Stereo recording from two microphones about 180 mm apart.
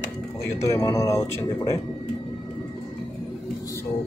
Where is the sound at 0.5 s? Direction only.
15° left (ahead or behind).